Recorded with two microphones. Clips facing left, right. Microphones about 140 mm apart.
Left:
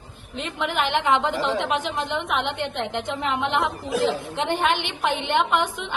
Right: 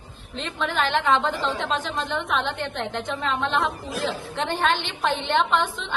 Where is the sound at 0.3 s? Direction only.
15° left (ahead or behind).